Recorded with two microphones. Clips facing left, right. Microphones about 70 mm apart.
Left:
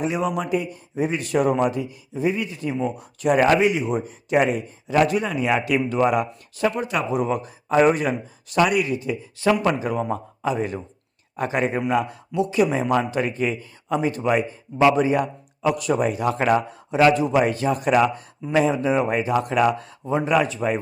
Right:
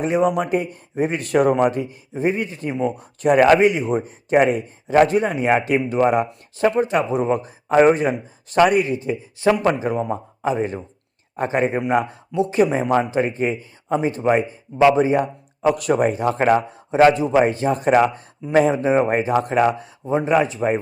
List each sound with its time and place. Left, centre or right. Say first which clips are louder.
0.0 s a man's voice: right 5 dB; right
15.7 s speech: right 3 dB; right